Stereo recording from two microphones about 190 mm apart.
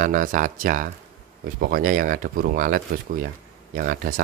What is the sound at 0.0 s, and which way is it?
Speech, 45° right (ahead or behind).